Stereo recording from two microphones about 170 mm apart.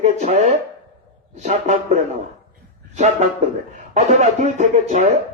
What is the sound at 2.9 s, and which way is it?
A man's voice, 45° right (ahead or behind).